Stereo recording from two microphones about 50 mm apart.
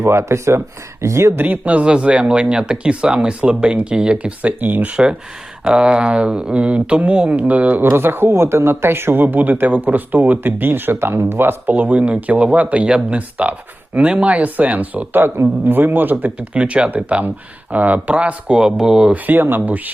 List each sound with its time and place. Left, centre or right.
0.0 s speech: right
1.4 s speech: right
4.6 s speech: right
5.6 s speech: centre
7.8 s speech: right
15.6 s speech: right
16.6 s speech: right
18.1 s speech: right
19.1 s speech: right